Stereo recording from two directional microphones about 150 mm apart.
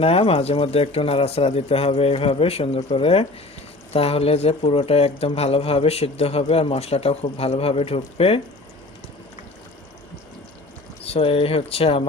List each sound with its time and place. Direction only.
0.0 s speech: 40° left (ahead or behind)
11.0 s speech: 40° left (ahead or behind)